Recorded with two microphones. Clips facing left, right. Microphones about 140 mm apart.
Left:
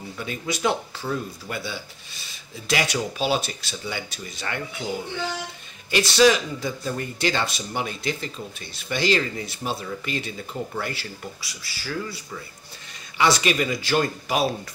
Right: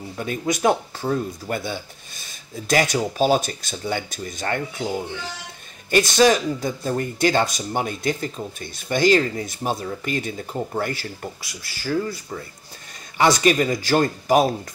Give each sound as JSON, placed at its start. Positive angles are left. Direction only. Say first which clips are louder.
{"t": 0.2, "sound": "speech", "louder": "right 5 dB", "side_deg": -45}
{"t": 5.9, "sound": "speech", "louder": "right 2 dB", "side_deg": -45}